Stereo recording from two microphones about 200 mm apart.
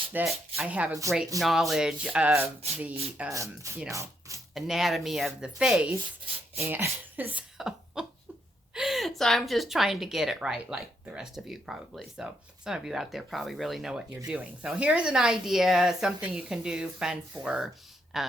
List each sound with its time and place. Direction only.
0.1 s speech: 10° right (ahead or behind)
1.4 s a woman's voice: centre (ahead or behind)
4.5 s a woman's voice: centre (ahead or behind)